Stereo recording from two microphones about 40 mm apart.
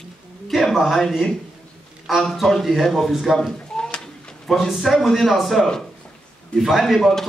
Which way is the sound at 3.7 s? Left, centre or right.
Left.